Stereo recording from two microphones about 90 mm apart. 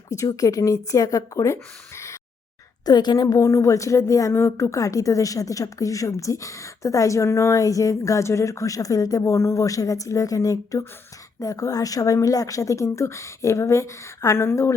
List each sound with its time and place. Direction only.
0.3 s a woman's voice: 40° left (ahead or behind)
2.8 s a woman's voice: 50° left (ahead or behind); by 14.8 s 30° left (ahead or behind)